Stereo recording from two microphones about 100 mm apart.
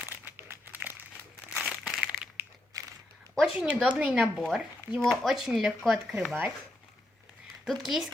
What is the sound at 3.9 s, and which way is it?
Speech, 15° right (ahead or behind).